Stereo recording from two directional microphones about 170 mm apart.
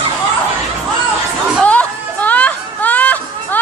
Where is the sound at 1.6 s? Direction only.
10° left (ahead or behind).